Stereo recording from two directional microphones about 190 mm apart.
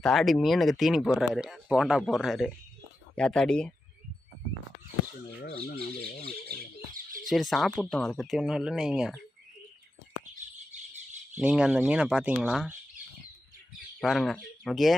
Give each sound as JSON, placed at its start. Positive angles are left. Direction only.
{"t": 0.0, "sound": "speech", "side_deg": 0}
{"t": 5.3, "sound": "speech", "side_deg": 60}
{"t": 7.3, "sound": "speech", "side_deg": 0}
{"t": 10.7, "sound": "bird", "side_deg": -40}
{"t": 11.3, "sound": "speech", "side_deg": -5}
{"t": 14.0, "sound": "speech", "side_deg": 0}